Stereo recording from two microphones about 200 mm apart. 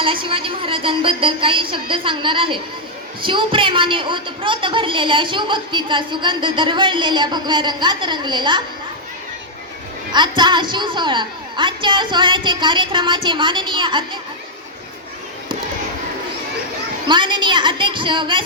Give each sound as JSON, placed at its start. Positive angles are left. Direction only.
{"t": 0.0, "sound": "a woman's voice", "side_deg": -25}
{"t": 10.1, "sound": "a woman's voice", "side_deg": -20}
{"t": 17.1, "sound": "a woman's voice", "side_deg": -25}